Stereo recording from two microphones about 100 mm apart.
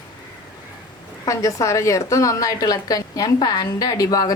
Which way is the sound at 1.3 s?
30° left (ahead or behind).